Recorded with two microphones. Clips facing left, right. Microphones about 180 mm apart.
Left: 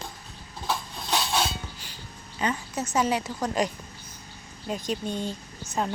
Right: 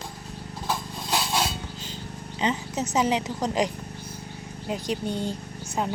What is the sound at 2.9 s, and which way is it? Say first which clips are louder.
A woman's voice: right 1 dB; 20° right (ahead or behind).